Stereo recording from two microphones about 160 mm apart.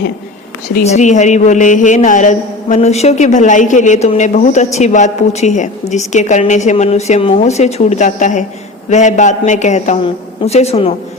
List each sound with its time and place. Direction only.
0.9 s a man's voice: 50° left (ahead or behind)